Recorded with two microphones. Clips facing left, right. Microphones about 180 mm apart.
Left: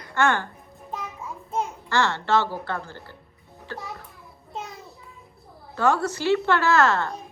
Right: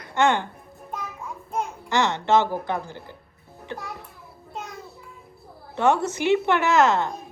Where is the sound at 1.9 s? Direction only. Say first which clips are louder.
Right 2 dB; 20° right (ahead or behind).